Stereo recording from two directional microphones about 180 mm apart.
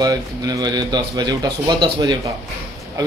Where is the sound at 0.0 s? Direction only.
20° right (ahead or behind).